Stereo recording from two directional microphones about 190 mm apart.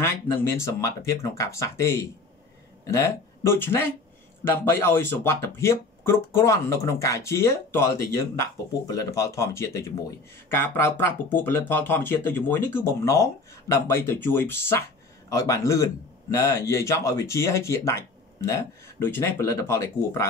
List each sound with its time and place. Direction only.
0.0 s speech: 15° left (ahead or behind)